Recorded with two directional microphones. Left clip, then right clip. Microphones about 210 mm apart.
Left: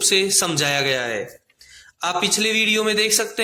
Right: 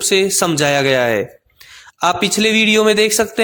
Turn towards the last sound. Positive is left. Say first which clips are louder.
# right 6 dB
turn(degrees=-40)  # may be behind; listen again after turning